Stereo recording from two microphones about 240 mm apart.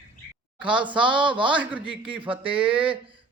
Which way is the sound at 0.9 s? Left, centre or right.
Centre.